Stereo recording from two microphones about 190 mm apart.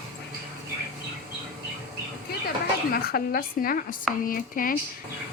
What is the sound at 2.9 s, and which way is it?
Speech, 50° left (ahead or behind).